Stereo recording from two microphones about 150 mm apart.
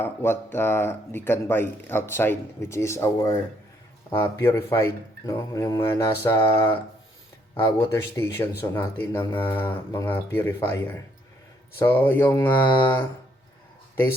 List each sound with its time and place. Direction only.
0.0 s speech: 15° left (ahead or behind)